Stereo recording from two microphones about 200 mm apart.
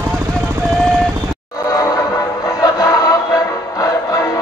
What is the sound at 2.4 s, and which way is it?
Music, 15° left (ahead or behind).